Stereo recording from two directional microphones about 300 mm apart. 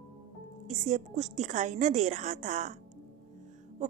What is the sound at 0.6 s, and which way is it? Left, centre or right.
A woman's voice, right.